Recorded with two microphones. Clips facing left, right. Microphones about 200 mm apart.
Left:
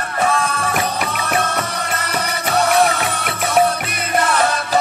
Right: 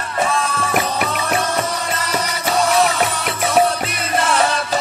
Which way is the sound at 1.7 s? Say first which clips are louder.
Right 1 dB; 60° left (ahead or behind).